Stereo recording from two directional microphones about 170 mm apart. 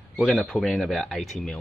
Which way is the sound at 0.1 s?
Centre (ahead or behind).